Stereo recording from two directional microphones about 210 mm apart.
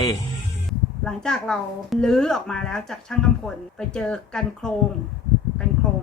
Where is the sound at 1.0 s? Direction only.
5° left (ahead or behind).